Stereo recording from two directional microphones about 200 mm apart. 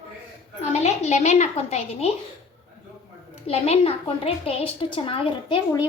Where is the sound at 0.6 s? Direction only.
35° left (ahead or behind).